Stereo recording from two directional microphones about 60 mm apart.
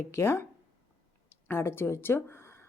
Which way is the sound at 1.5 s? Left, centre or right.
Left.